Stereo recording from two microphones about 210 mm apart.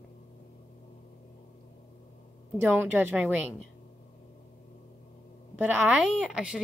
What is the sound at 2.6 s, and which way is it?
Speech, 10° right (ahead or behind).